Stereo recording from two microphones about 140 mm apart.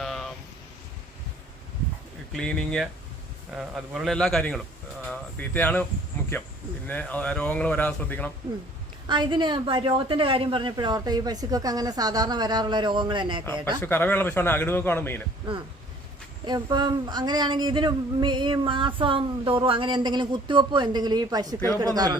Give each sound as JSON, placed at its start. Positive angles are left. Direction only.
{"t": 0.0, "sound": "a sound", "side_deg": 5}
{"t": 2.3, "sound": "a man's voice", "side_deg": 5}
{"t": 5.0, "sound": "a man's voice", "side_deg": 10}
{"t": 9.0, "sound": "speech", "side_deg": -35}
{"t": 13.8, "sound": "a man's voice", "side_deg": 15}
{"t": 16.5, "sound": "speech", "side_deg": -30}